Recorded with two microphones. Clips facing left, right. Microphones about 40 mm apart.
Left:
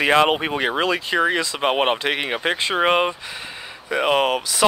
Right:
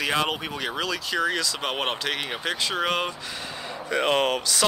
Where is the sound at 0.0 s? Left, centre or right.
Left.